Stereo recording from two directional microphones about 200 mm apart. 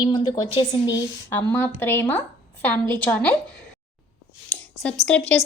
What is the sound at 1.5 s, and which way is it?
Speech, 10° left (ahead or behind).